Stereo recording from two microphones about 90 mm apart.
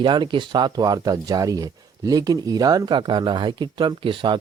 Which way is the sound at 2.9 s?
60° right (ahead or behind).